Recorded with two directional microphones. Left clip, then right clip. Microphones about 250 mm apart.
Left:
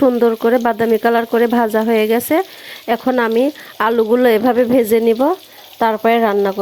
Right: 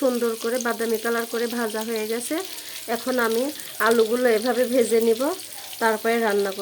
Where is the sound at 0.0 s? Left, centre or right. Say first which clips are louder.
Left 10 dB; left.